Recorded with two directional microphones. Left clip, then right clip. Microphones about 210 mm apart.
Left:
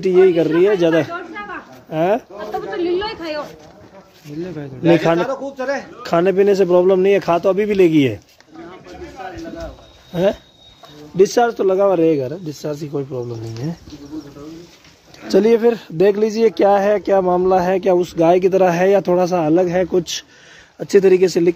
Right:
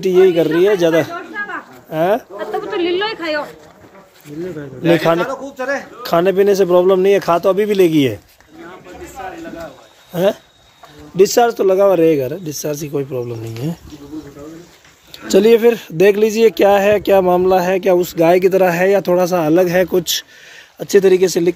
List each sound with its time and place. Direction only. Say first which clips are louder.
0.0 s speech: right 1 dB; 5° right (ahead or behind)
2.8 s a sound: right 2 dB; 35° right (ahead or behind)
5.2 s speech: right 1 dB; 35° left (ahead or behind)
6.0 s speech: right 1 dB; centre (ahead or behind)
10.1 s speech: right 2 dB; centre (ahead or behind)
15.2 s speech: right 3 dB; centre (ahead or behind)